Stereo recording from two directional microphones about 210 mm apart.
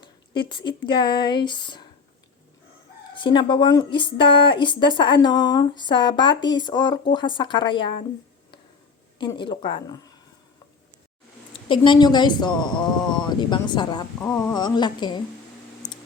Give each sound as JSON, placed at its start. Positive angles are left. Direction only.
{"t": 0.0, "sound": "speech", "side_deg": 20}
{"t": 3.2, "sound": "speech", "side_deg": 20}
{"t": 9.1, "sound": "speech", "side_deg": 20}
{"t": 11.7, "sound": "speech", "side_deg": 20}
{"t": 14.2, "sound": "speech", "side_deg": 10}
{"t": 15.8, "sound": "a sound", "side_deg": 20}